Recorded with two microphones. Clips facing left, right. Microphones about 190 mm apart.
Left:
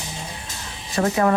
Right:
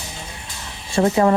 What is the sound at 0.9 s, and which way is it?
Speech, 25° right (ahead or behind).